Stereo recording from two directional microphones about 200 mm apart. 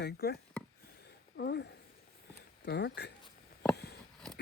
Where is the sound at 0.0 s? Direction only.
50° left (ahead or behind).